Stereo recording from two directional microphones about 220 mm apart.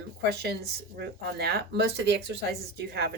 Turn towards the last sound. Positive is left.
turn(degrees=-50)  # may be behind; listen again after turning